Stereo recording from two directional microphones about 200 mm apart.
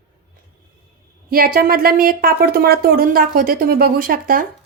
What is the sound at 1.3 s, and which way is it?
Speech, 45° right (ahead or behind).